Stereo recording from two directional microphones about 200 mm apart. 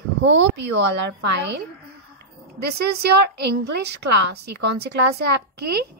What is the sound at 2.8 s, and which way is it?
A child's voice, 55° right (ahead or behind).